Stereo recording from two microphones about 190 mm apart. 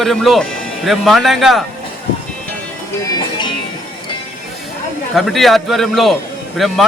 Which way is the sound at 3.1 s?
25° left (ahead or behind).